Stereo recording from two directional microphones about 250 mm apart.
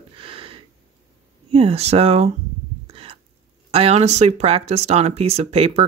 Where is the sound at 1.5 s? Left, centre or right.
Right.